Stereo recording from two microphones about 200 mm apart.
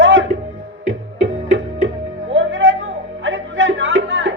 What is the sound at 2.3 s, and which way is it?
Music, 75° right (ahead or behind).